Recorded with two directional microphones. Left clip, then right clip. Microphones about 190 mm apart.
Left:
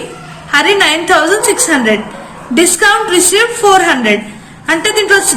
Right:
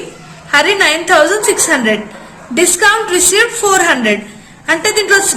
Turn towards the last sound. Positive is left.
turn(degrees=-45)  # may be behind; listen again after turning